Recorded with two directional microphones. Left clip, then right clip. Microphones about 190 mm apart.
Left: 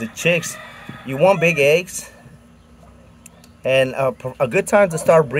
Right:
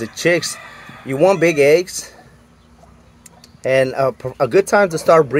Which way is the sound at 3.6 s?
30° right (ahead or behind).